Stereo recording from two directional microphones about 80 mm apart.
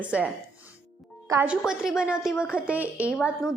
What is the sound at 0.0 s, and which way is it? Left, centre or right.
Speech, centre.